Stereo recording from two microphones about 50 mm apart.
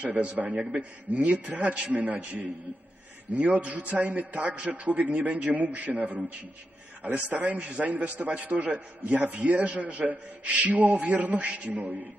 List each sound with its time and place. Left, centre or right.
0.0 s a man's voice: right
7.3 s a man's voice: right